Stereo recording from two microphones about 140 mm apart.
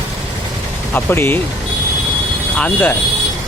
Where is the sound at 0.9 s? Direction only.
15° left (ahead or behind).